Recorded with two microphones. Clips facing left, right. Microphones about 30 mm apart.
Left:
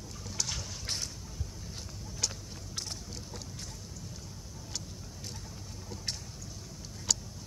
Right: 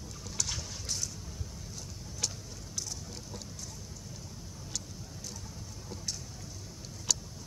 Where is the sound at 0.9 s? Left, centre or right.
Left.